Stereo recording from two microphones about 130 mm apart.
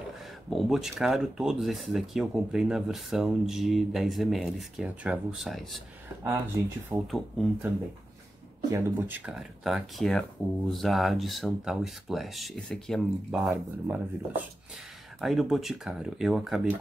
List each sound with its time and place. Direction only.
0.5 s speech: centre (ahead or behind)
6.5 s speech: 25° right (ahead or behind)
7.1 s speech: centre (ahead or behind)
8.7 s speech: 15° right (ahead or behind)
9.3 s speech: centre (ahead or behind)
13.8 s speech: 15° right (ahead or behind)
15.1 s speech: centre (ahead or behind)